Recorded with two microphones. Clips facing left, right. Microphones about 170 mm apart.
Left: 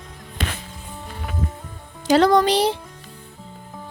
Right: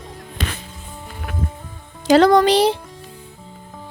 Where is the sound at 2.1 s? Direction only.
90° right.